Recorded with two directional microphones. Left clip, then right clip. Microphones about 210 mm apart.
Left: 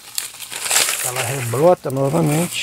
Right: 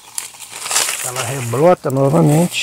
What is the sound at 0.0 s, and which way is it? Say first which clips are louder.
Crumpling: left 2 dB; 15° left (ahead or behind).